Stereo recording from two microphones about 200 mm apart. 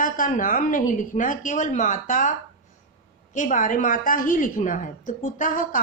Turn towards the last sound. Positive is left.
turn(degrees=40)  # may be behind; listen again after turning